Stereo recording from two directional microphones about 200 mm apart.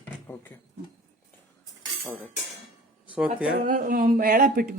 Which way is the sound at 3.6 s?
40° right (ahead or behind).